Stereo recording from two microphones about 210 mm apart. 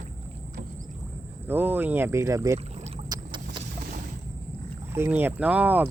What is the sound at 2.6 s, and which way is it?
Boat, 30° right (ahead or behind).